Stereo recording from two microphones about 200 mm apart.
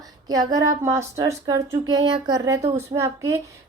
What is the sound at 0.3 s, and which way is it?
A woman's voice, 15° right (ahead or behind).